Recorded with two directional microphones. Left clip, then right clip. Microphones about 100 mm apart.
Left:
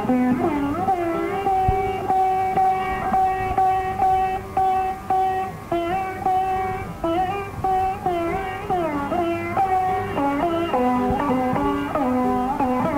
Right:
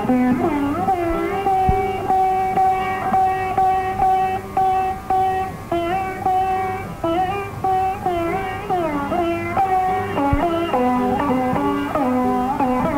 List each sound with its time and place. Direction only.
0.1 s music: 35° right (ahead or behind)
8.7 s music: 40° right (ahead or behind)